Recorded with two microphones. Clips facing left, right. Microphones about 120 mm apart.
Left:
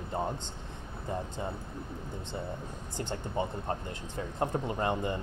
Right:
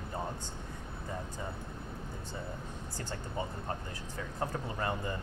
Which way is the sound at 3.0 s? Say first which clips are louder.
Left 6 dB; 25° left (ahead or behind).